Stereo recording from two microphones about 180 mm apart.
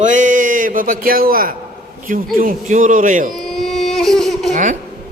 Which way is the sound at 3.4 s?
Centre (ahead or behind).